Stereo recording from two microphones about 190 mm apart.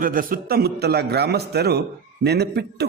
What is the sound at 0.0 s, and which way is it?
A man's voice, 50° right (ahead or behind).